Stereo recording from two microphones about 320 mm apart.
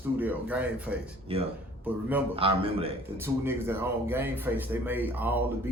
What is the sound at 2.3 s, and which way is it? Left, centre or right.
Speech, centre.